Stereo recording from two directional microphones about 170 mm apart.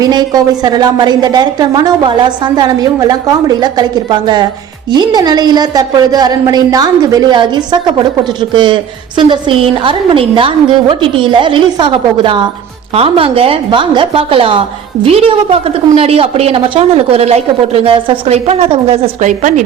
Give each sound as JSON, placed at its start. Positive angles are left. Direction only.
{"t": 0.0, "sound": "a woman's voice", "side_deg": -25}
{"t": 15.6, "sound": "a woman's voice", "side_deg": -35}